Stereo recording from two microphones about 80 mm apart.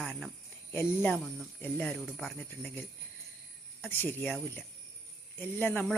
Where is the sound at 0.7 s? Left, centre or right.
Left.